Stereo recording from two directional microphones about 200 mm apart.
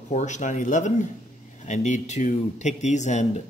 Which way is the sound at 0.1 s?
35° left (ahead or behind).